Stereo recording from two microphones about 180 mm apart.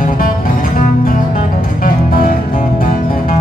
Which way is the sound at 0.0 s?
50° left (ahead or behind).